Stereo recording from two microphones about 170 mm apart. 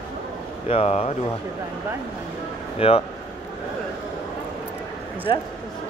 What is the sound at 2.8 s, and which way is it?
Speech, 35° left (ahead or behind).